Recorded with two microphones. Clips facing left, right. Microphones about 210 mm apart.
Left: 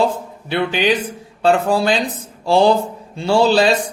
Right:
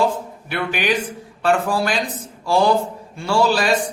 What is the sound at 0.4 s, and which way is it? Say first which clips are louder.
Speech: left 5 dB; 25° left (ahead or behind).